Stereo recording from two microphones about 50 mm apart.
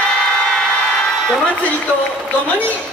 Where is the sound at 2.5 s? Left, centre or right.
Left.